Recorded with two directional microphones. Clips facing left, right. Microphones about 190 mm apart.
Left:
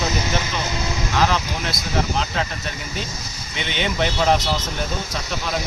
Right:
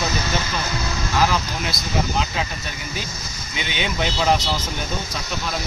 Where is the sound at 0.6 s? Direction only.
20° left (ahead or behind).